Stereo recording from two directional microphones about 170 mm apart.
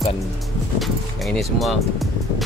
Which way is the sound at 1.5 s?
Centre (ahead or behind).